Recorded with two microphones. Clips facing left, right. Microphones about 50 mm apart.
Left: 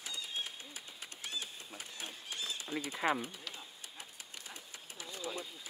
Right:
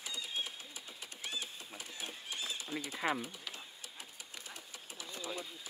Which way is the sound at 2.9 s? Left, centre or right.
Centre.